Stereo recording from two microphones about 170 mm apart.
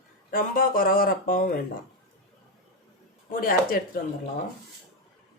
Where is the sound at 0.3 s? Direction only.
55° left (ahead or behind).